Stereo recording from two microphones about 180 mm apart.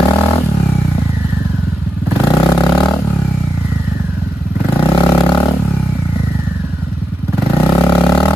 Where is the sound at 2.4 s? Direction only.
20° left (ahead or behind).